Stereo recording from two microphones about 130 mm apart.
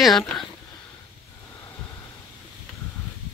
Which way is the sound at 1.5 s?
20° left (ahead or behind).